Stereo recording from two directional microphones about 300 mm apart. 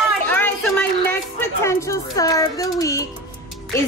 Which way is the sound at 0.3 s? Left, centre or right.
Centre.